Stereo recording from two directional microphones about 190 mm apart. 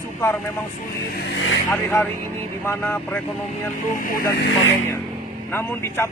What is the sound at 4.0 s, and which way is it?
Speech, 45° left (ahead or behind).